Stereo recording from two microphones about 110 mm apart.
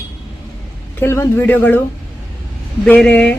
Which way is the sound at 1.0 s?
25° left (ahead or behind).